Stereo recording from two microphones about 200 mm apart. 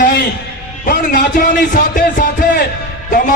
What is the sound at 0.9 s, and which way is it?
A man's voice, 45° left (ahead or behind).